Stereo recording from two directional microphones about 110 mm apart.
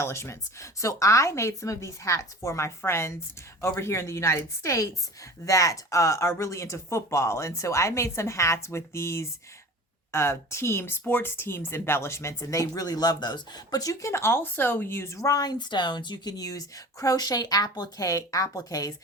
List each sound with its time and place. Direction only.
0.0 s speech: 25° left (ahead or behind)